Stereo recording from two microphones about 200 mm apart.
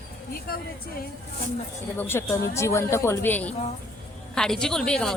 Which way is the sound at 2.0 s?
10° left (ahead or behind).